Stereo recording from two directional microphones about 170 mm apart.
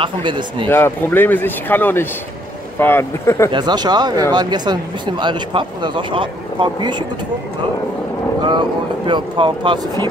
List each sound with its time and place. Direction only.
0.0 s speech: 30° right (ahead or behind)
0.7 s speech: 10° left (ahead or behind)
3.5 s speech: 25° right (ahead or behind)
8.4 s speech: 25° right (ahead or behind)